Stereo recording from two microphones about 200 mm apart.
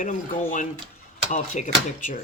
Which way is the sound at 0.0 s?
40° left (ahead or behind).